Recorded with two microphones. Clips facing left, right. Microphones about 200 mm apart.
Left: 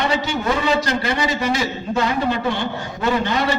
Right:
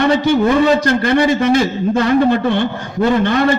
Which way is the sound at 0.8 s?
55° right (ahead or behind).